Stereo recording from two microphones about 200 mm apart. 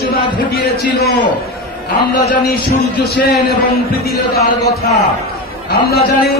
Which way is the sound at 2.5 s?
50° left (ahead or behind).